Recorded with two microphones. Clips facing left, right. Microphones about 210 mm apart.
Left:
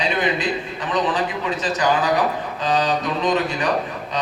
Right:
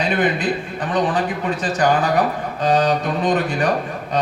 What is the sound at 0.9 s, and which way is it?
A man's voice, 50° right (ahead or behind).